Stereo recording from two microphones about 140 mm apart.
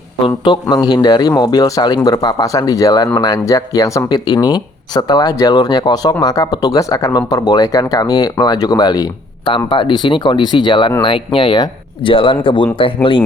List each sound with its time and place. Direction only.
0.3 s a man's voice: 35° left (ahead or behind)